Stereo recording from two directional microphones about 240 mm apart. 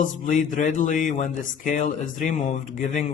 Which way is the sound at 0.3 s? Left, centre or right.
Left.